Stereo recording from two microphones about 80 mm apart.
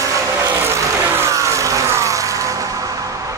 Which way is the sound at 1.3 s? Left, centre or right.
Right.